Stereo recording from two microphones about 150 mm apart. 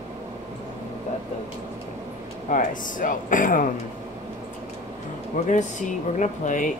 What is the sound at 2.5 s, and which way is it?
Speech, 60° left (ahead or behind).